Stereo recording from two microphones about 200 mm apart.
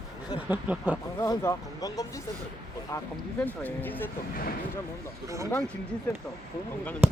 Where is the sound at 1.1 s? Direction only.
15° left (ahead or behind).